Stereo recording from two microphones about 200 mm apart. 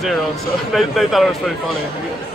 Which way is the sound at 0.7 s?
Centre (ahead or behind).